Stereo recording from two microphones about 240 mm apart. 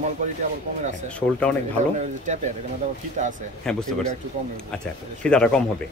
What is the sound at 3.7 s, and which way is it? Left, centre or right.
Speech, centre.